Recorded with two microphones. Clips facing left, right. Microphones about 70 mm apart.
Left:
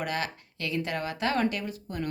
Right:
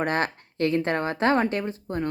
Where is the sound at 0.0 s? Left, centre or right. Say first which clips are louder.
Right 6 dB; right.